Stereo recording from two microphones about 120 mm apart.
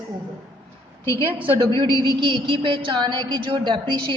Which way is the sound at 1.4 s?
45° right (ahead or behind).